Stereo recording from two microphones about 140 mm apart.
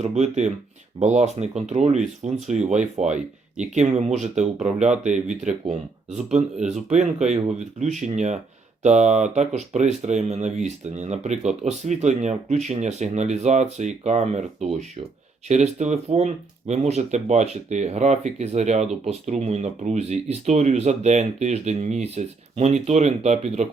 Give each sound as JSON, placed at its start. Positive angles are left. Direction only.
{"t": 0.0, "sound": "speech", "side_deg": -55}